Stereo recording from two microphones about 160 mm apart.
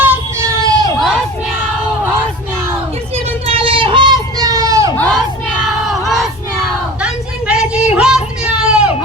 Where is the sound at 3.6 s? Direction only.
35° right (ahead or behind).